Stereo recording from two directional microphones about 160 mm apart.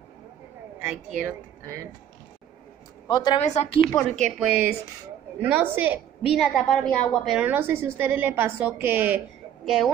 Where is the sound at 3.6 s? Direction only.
40° left (ahead or behind).